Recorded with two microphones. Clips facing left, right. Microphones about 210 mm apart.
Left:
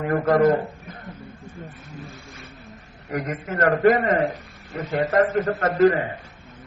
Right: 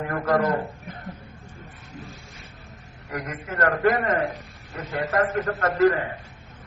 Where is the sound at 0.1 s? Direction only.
25° left (ahead or behind).